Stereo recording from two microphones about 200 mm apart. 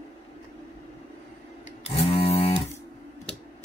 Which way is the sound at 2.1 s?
30° left (ahead or behind).